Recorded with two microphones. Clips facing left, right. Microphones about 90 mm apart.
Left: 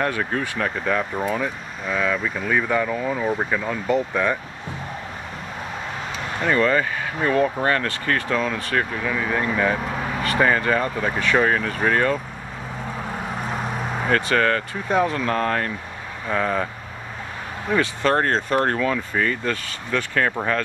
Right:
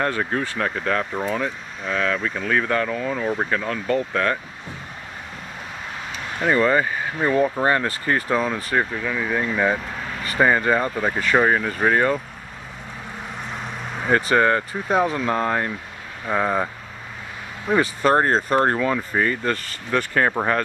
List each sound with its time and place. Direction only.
0.2 s speech: 10° right (ahead or behind); by 4.4 s 10° left (ahead or behind)
6.4 s speech: 15° right (ahead or behind)
14.1 s speech: 20° right (ahead or behind)
14.9 s speech: 10° right (ahead or behind)
17.6 s speech: 15° right (ahead or behind)